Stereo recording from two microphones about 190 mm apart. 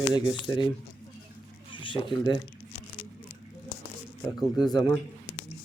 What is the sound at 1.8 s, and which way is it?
Speech, 25° left (ahead or behind).